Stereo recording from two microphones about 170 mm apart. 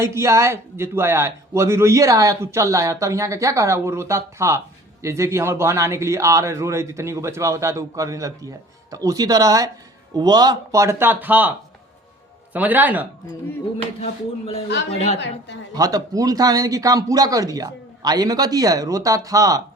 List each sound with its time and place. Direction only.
0.0 s a man's voice: 15° right (ahead or behind)
12.5 s a man's voice: 10° right (ahead or behind)
14.0 s speech: 35° left (ahead or behind)
15.7 s speech: 20° right (ahead or behind)